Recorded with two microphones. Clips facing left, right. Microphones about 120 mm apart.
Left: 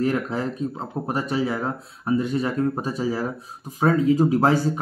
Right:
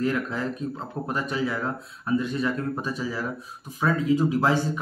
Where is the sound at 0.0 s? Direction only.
30° left (ahead or behind).